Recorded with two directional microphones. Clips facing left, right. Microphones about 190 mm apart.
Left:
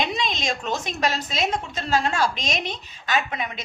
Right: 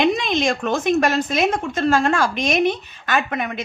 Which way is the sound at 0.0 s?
55° right (ahead or behind).